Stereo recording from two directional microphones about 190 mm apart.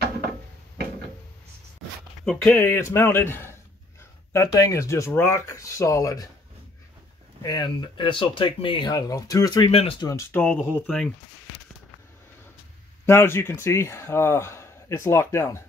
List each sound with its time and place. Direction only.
2.2 s speech: 5° left (ahead or behind)
7.4 s speech: 20° left (ahead or behind)
9.7 s speech: 30° left (ahead or behind)
10.0 s speech: 15° left (ahead or behind)
10.4 s speech: 5° left (ahead or behind)
13.0 s speech: 15° left (ahead or behind)